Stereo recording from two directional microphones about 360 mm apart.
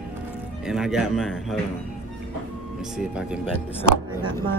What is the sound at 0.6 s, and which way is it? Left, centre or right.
Speech, centre.